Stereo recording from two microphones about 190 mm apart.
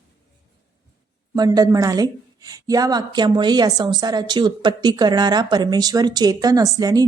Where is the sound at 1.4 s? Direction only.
20° right (ahead or behind).